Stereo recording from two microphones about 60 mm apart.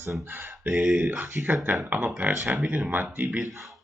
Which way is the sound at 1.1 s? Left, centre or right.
Right.